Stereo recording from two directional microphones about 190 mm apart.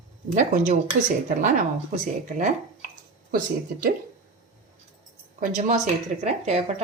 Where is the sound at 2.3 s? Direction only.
40° right (ahead or behind).